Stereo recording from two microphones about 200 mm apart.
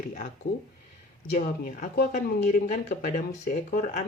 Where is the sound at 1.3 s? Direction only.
40° left (ahead or behind).